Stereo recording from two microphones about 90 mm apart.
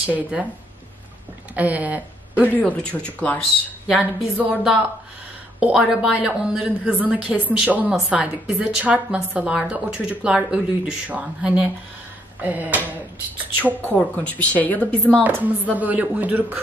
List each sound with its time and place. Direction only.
0.0 s a woman's voice: 15° right (ahead or behind)
1.5 s speech: 15° right (ahead or behind)
2.4 s speech: 20° left (ahead or behind)
3.8 s a woman's voice: 15° right (ahead or behind)
5.6 s a woman's voice: 5° right (ahead or behind)
13.9 s speech: 15° left (ahead or behind)
15.2 s a woman's voice: 20° right (ahead or behind)